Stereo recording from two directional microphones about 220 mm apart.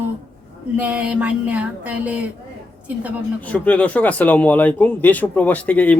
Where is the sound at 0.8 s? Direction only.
5° right (ahead or behind).